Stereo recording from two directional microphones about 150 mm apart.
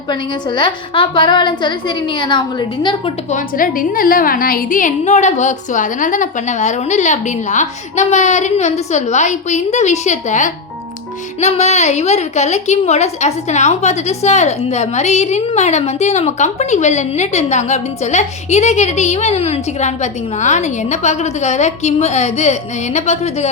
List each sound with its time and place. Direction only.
0.1 s a woman's voice: 30° left (ahead or behind)
3.3 s a woman's voice: 65° left (ahead or behind); by 23.5 s 50° left (ahead or behind)